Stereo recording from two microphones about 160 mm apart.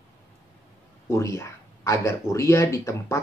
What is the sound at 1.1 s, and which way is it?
Speech, 15° left (ahead or behind).